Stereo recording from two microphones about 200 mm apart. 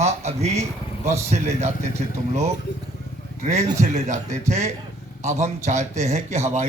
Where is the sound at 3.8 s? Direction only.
35° right (ahead or behind).